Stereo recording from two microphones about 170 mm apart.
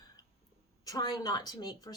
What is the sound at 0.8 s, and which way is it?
Speech, 25° left (ahead or behind).